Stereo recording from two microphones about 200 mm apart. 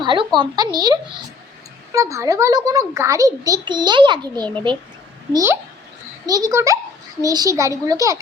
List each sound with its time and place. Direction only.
0.0 s a child's voice: 25° right (ahead or behind)